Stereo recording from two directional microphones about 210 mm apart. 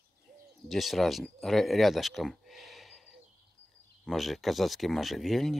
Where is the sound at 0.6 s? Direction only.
Centre (ahead or behind).